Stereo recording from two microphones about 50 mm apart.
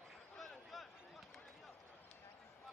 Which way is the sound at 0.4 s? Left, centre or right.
Centre.